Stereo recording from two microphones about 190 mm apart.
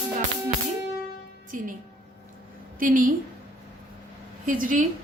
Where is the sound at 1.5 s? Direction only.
45° right (ahead or behind).